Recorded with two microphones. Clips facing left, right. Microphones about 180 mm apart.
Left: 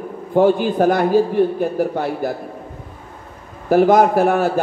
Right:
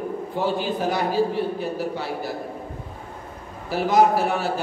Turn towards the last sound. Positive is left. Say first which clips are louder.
# left 5 dB
turn(degrees=55)  # may be behind; listen again after turning